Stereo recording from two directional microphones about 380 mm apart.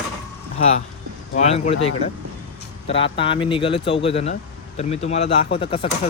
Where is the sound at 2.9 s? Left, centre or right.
Centre.